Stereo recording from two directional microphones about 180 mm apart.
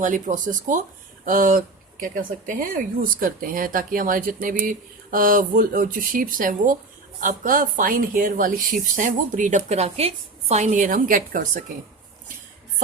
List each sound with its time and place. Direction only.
0.0 s speech: 45° right (ahead or behind)